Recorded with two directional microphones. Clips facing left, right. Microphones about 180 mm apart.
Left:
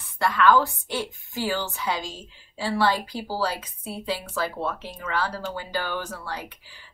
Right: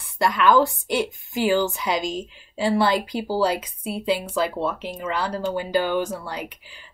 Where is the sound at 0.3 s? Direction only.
15° right (ahead or behind).